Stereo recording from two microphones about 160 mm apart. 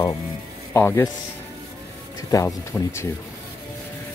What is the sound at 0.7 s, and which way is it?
Speech, 15° left (ahead or behind).